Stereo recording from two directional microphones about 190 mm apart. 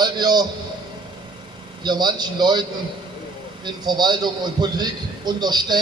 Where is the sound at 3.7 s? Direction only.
20° right (ahead or behind).